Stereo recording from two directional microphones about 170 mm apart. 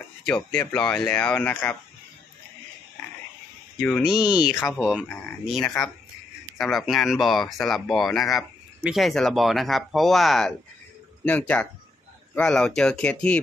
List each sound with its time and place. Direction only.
0.2 s speech: 5° left (ahead or behind)
4.0 s speech: 5° right (ahead or behind)
4.3 s speech: 25° left (ahead or behind)
4.7 s speech: 5° left (ahead or behind)